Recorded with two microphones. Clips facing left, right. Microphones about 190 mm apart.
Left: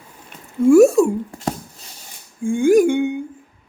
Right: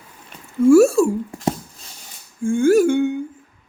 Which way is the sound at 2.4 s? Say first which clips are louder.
Left 1 dB; 15° left (ahead or behind).